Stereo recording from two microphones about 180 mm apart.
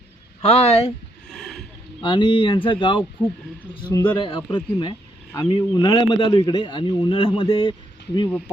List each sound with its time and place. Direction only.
0.4 s speech: 35° left (ahead or behind)
1.3 s a sound: centre (ahead or behind)
2.0 s a man's voice: 25° left (ahead or behind)
3.2 s speech: 10° left (ahead or behind)
3.8 s a man's voice: 25° left (ahead or behind)